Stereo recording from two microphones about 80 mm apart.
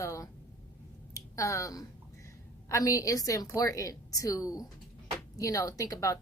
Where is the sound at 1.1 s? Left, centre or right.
Left.